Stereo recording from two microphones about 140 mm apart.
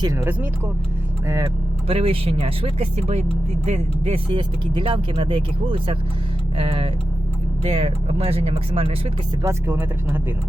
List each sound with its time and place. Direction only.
0.0 s speech: 20° right (ahead or behind)
1.9 s speech: 40° right (ahead or behind)
9.4 s speech: 20° right (ahead or behind)